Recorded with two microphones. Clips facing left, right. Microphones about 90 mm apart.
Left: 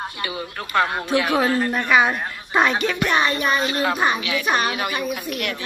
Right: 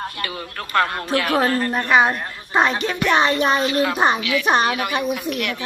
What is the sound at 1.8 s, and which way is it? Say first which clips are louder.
Speech: right 3 dB; 35° right (ahead or behind).